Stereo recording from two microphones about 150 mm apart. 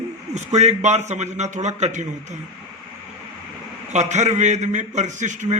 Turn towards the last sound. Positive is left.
turn(degrees=-55)  # may be behind; listen again after turning